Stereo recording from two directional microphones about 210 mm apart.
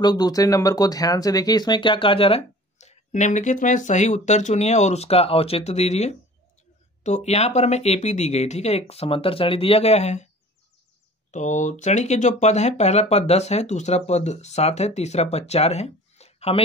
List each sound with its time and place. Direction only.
0.0 s speech: 20° left (ahead or behind)
11.3 s speech: 35° left (ahead or behind)